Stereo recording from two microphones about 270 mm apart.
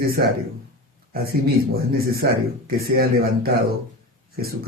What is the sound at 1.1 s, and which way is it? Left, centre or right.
A man's voice, right.